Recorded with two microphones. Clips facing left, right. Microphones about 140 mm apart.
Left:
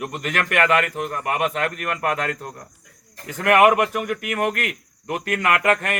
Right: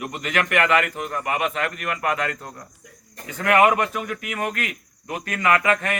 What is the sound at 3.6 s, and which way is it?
Speech, 65° left (ahead or behind).